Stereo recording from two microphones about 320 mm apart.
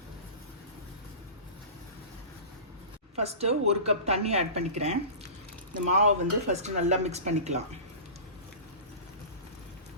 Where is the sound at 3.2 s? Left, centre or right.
Centre.